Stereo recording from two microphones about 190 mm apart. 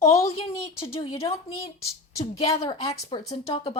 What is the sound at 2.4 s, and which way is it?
Speech, 20° left (ahead or behind).